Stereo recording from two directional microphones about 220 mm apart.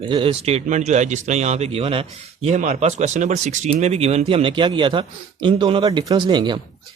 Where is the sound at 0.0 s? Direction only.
25° right (ahead or behind).